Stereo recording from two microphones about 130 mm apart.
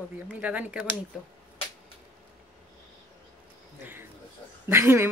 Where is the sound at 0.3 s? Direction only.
10° right (ahead or behind).